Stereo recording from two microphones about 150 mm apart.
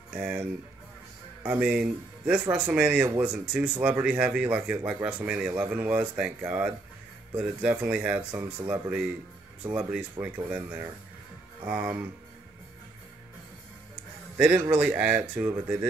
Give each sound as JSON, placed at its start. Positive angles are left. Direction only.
{"t": 0.1, "sound": "speech", "side_deg": -10}
{"t": 14.3, "sound": "speech", "side_deg": -10}